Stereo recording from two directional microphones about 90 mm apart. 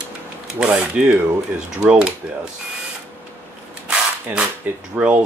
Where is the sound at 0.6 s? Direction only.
10° right (ahead or behind).